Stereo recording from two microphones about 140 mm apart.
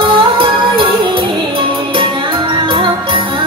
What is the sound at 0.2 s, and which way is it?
Music, 35° right (ahead or behind).